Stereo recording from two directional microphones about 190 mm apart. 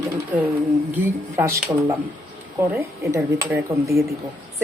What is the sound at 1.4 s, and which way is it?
Speech, 10° right (ahead or behind).